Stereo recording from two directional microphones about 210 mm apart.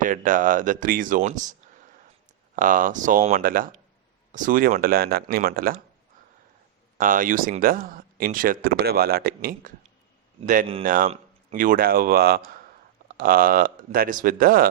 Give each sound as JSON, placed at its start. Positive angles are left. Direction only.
{"t": 0.0, "sound": "speech", "side_deg": -40}
{"t": 2.6, "sound": "speech", "side_deg": -40}
{"t": 7.0, "sound": "speech", "side_deg": -40}